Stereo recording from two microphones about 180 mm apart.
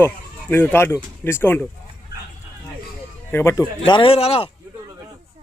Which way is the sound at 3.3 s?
15° left (ahead or behind).